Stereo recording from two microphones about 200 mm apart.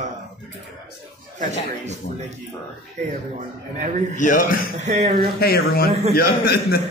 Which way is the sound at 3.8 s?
40° right (ahead or behind).